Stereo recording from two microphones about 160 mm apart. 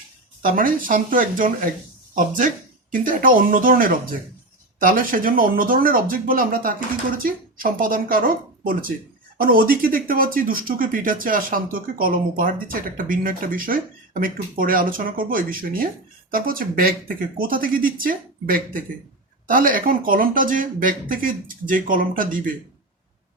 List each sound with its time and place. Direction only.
0.4 s speech: 60° right (ahead or behind)